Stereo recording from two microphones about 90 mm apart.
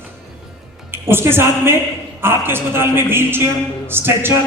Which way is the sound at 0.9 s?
25° right (ahead or behind).